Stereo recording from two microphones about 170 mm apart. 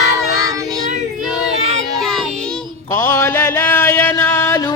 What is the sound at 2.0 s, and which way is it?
Music, 5° left (ahead or behind).